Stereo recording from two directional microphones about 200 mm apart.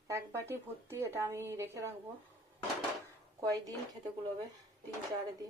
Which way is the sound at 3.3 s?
20° right (ahead or behind).